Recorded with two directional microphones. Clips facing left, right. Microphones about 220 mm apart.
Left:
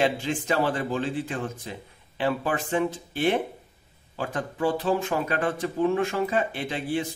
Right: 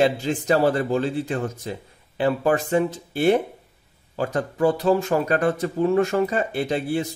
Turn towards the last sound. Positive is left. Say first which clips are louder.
# right 5 dB
turn(degrees=-40)  # may be behind; listen again after turning